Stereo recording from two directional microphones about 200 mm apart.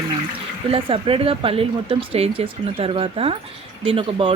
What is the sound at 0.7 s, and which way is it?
A woman's voice, 25° right (ahead or behind).